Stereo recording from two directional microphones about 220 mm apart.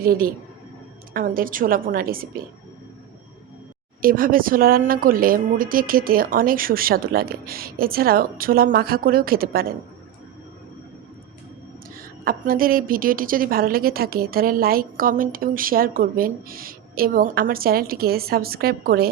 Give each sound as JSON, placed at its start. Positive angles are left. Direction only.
{"t": 0.0, "sound": "a woman's voice", "side_deg": -40}
{"t": 4.0, "sound": "a woman's voice", "side_deg": -40}
{"t": 11.9, "sound": "a woman's voice", "side_deg": -40}